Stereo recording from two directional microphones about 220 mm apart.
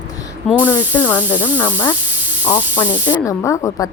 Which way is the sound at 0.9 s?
10° left (ahead or behind).